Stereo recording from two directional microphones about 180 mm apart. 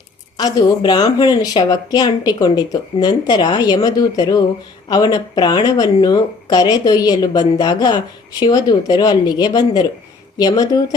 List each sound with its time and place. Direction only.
0.3 s speech: 20° left (ahead or behind)